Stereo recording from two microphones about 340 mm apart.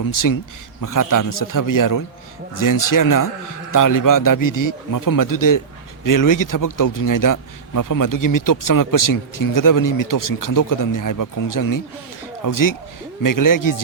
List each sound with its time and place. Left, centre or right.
0.1 s a man's voice: left